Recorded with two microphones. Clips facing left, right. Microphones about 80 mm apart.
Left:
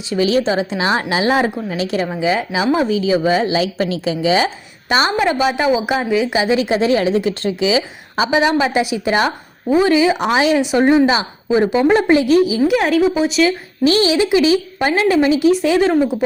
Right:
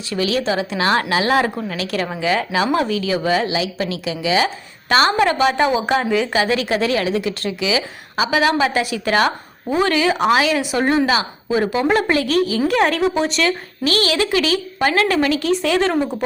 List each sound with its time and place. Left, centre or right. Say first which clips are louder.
0.1 s a woman's voice: left 4 dB; left
3.5 s a woman's voice: left 4 dB; left
4.9 s a woman's voice: even; centre
13.8 s a woman's voice: left 5 dB; left